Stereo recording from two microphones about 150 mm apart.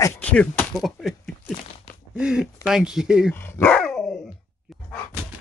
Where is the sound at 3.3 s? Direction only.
15° left (ahead or behind).